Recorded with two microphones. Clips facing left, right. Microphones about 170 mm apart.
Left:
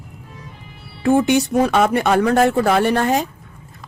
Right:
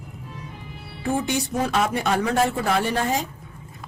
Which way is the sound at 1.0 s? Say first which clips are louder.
Left 9 dB; 75° left (ahead or behind).